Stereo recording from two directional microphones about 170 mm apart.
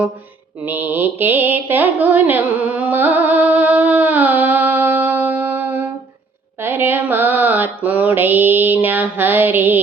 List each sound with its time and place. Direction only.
0.6 s mantra: 10° right (ahead or behind)